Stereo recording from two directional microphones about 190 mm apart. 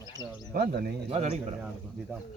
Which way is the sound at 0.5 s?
55° right (ahead or behind).